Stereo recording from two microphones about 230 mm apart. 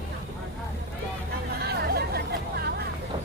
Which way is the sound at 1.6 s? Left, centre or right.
Right.